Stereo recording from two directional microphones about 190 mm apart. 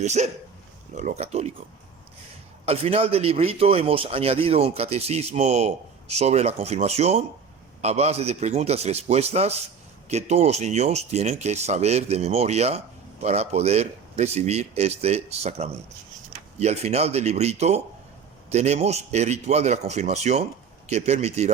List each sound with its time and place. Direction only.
0.0 s a man's voice: 35° right (ahead or behind)
2.6 s a man's voice: 30° right (ahead or behind)